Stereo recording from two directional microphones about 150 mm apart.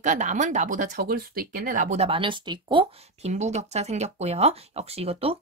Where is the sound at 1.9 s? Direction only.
40° right (ahead or behind).